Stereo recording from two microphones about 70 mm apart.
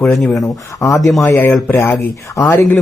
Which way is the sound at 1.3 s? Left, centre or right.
Left.